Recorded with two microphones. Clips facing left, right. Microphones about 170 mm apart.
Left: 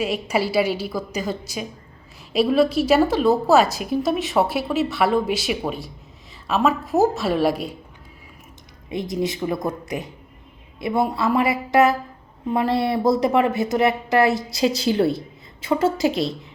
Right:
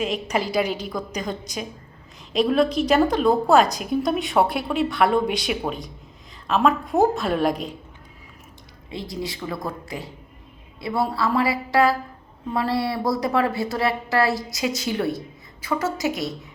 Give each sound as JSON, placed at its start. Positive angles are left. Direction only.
{"t": 0.0, "sound": "a woman's voice", "side_deg": 5}
{"t": 8.9, "sound": "a woman's voice", "side_deg": 20}